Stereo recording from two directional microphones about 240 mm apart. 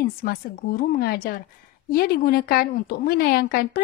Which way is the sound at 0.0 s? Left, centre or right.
Left.